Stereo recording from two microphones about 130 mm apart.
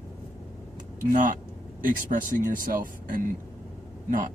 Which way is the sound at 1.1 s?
80° right.